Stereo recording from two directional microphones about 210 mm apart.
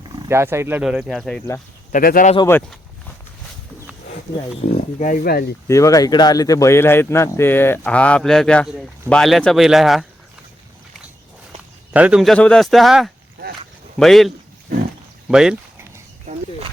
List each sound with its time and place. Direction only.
0.2 s speech: 10° right (ahead or behind)
1.9 s speech: 40° left (ahead or behind)
2.5 s speech: 10° left (ahead or behind)
4.7 s speech: 40° left (ahead or behind)
5.6 s a man's voice: 15° left (ahead or behind); by 10.1 s centre (ahead or behind)
11.9 s a man's voice: 5° right (ahead or behind)
15.3 s a sound: 5° right (ahead or behind)